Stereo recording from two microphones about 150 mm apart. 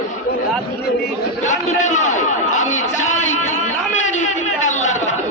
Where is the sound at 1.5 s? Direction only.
55° left (ahead or behind).